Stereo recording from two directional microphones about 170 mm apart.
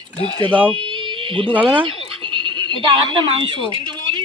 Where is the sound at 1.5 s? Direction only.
10° right (ahead or behind).